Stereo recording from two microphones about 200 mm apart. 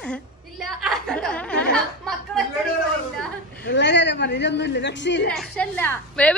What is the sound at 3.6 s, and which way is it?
Speech, 60° left (ahead or behind).